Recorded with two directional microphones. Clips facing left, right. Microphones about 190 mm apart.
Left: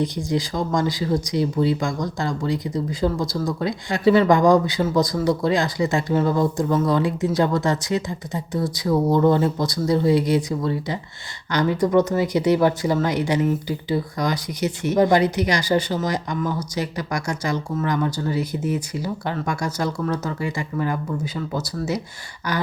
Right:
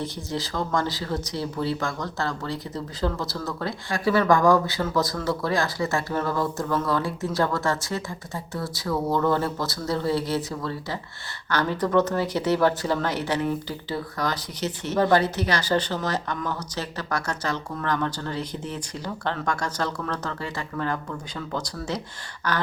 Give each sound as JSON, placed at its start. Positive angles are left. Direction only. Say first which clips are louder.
{"t": 0.0, "sound": "speech", "louder": "left 7 dB", "side_deg": 15}